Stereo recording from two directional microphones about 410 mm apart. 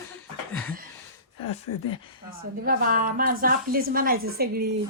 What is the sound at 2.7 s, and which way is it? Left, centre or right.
A woman's voice, right.